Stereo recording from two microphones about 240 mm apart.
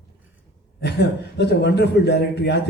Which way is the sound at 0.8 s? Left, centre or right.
Left.